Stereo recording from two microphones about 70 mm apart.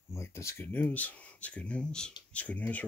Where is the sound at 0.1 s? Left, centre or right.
Left.